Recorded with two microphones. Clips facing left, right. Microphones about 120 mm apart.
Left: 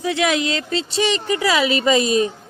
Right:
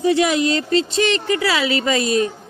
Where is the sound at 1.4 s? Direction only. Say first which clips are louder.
Left 1 dB; 20° left (ahead or behind).